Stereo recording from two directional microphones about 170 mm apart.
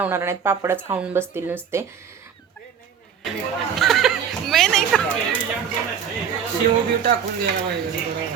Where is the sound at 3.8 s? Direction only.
Centre (ahead or behind).